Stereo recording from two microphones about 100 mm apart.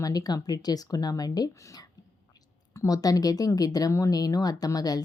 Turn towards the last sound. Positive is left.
turn(degrees=40)  # may be behind; listen again after turning